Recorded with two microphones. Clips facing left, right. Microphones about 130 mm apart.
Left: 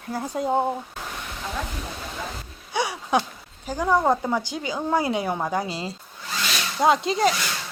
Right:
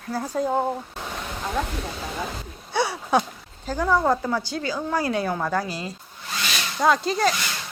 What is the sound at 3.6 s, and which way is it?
A woman's voice, 15° left (ahead or behind).